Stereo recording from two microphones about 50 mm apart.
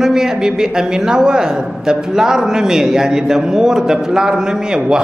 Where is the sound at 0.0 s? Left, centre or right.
Centre.